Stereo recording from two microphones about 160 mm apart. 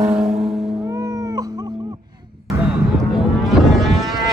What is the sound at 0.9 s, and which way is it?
Cat, 20° right (ahead or behind).